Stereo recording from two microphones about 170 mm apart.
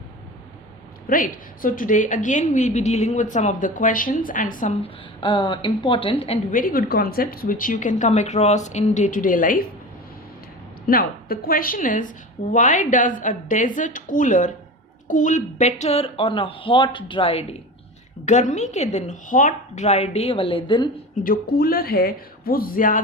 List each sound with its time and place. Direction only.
1.1 s a woman's voice: 55° left (ahead or behind)
4.7 s a woman's voice: 30° left (ahead or behind)
6.5 s a woman's voice: 55° left (ahead or behind)
10.8 s a woman's voice: 60° left (ahead or behind); by 17.4 s 35° left (ahead or behind)
18.3 s a woman's voice: 45° left (ahead or behind); by 20.9 s 30° left (ahead or behind)
21.2 s speech: 60° left (ahead or behind)